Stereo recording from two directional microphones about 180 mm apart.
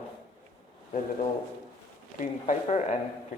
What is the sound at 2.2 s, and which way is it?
Speech, 45° left (ahead or behind).